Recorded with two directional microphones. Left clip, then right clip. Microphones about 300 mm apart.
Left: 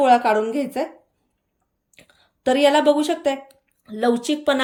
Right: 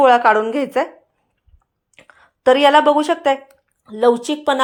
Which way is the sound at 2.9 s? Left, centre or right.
Centre.